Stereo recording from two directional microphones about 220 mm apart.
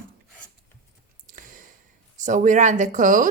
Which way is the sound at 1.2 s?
35° right (ahead or behind).